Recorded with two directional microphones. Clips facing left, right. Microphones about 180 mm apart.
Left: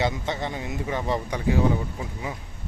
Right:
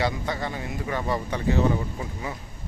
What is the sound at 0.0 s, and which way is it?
Speech, 20° left (ahead or behind).